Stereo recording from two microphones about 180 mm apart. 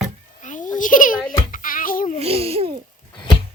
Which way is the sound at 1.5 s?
50° left (ahead or behind).